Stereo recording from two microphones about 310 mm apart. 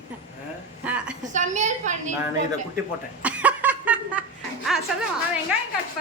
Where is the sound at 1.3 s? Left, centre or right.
Right.